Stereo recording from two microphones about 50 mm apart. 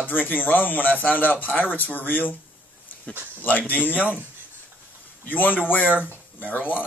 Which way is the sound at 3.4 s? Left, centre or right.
Left.